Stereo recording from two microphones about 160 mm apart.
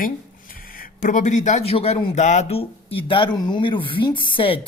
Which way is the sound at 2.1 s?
50° left (ahead or behind).